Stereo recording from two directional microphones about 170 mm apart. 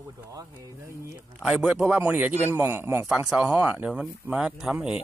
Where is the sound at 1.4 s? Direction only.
5° right (ahead or behind).